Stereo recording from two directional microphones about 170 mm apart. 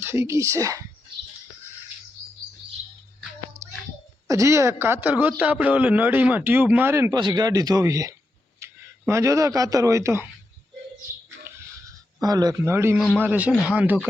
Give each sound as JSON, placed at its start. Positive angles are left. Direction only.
{"t": 0.0, "sound": "a man's voice", "side_deg": -15}
{"t": 4.3, "sound": "a man's voice", "side_deg": -20}
{"t": 12.2, "sound": "a man's voice", "side_deg": -20}